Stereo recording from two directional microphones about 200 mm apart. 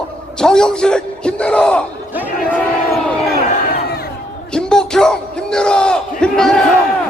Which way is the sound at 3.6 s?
50° left (ahead or behind).